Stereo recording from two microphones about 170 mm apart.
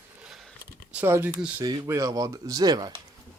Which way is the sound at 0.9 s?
10° right (ahead or behind).